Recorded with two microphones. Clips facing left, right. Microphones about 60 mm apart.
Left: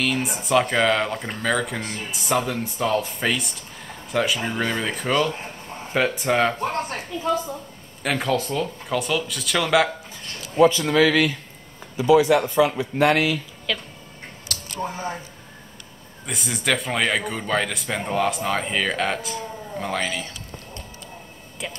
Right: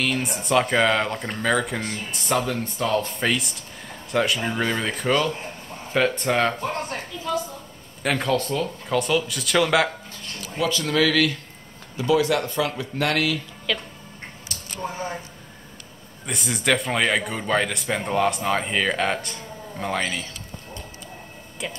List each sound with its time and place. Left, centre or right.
0.0 s speech: centre
8.0 s speech: centre
10.6 s speech: left
13.7 s speech: centre
14.5 s a sound: left
16.3 s speech: centre
21.6 s speech: centre